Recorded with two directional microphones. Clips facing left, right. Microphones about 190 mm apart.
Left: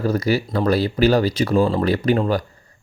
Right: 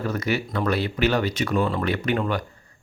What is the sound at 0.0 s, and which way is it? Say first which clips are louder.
Speech: left 6 dB; 35° left (ahead or behind).